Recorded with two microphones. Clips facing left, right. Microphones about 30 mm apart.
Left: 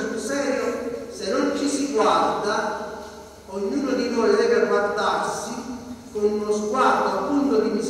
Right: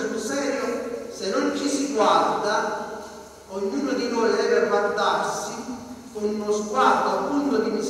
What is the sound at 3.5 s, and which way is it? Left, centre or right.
A man's voice, centre.